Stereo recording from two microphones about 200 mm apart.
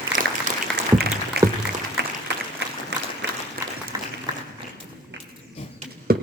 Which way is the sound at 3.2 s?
60° right (ahead or behind).